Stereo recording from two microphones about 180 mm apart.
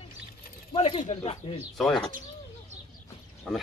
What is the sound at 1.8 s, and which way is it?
Speech, centre (ahead or behind).